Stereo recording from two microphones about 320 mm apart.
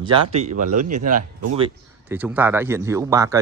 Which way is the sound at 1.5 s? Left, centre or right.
Centre.